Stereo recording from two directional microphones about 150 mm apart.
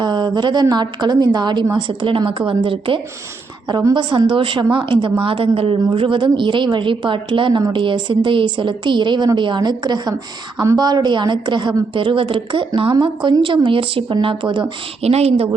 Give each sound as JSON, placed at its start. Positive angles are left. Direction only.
{"t": 0.0, "sound": "a woman's voice", "side_deg": -30}
{"t": 15.0, "sound": "speech", "side_deg": -45}